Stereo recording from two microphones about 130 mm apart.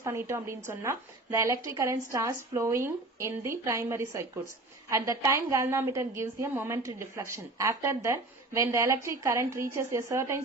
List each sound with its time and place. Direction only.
0.0 s a woman's voice: 20° right (ahead or behind)